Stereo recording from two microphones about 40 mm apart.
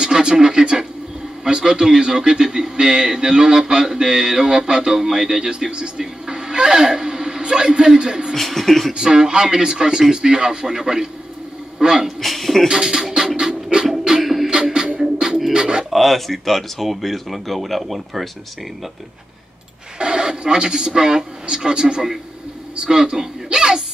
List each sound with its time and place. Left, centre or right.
0.0 s a man's voice: centre
8.4 s speech: centre
8.9 s a man's voice: centre
12.2 s a sound: centre
12.6 s music: centre
13.4 s pant: right
14.2 s music: centre
14.5 s music: centre
15.5 s pigeon: right
15.9 s speech: centre
20.0 s a woman's voice: right